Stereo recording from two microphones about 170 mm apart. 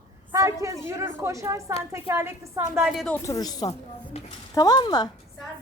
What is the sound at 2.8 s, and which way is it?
Speech, centre (ahead or behind).